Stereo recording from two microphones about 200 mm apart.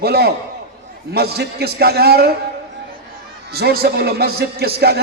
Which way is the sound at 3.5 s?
50° right (ahead or behind).